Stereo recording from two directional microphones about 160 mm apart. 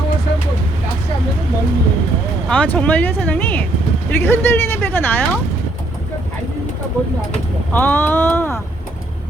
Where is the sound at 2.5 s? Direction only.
10° left (ahead or behind).